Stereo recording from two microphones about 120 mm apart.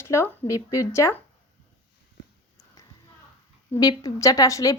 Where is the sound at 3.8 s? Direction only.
35° left (ahead or behind).